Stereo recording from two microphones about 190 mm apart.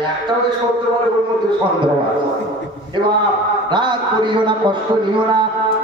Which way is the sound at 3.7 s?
25° right (ahead or behind).